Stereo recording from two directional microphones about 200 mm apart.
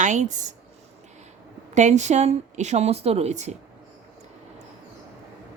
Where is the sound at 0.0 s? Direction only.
35° right (ahead or behind).